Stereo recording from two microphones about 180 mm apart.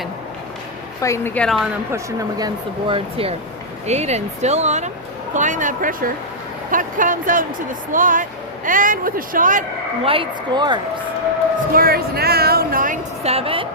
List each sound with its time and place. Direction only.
1.0 s a woman's voice: 15° left (ahead or behind)
1.9 s speech: 15° right (ahead or behind)
2.8 s speech: 30° right (ahead or behind); by 9.6 s 45° right (ahead or behind)
10.0 s speech: 30° right (ahead or behind)
11.7 s a sound: 55° right (ahead or behind)
13.2 s a woman's voice: 35° right (ahead or behind)